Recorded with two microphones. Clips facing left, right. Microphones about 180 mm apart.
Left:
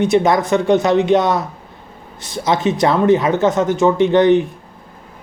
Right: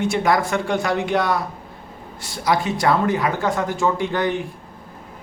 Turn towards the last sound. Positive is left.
turn(degrees=20)  # may be behind; listen again after turning